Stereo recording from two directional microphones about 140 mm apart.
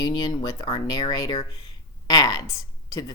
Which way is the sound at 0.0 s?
30° left (ahead or behind).